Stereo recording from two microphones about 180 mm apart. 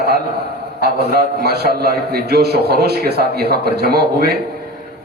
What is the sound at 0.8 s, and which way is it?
A man's voice, 60° right (ahead or behind).